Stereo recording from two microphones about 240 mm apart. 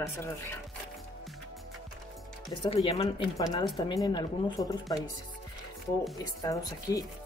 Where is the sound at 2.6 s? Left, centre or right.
Left.